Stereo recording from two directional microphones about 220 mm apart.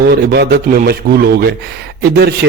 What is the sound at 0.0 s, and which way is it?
Speech, 45° right (ahead or behind).